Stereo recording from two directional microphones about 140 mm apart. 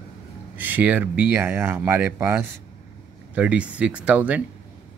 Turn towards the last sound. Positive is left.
turn(degrees=-10)  # may be behind; listen again after turning